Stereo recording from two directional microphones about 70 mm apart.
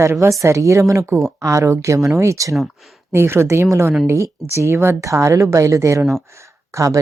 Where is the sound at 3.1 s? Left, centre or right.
Right.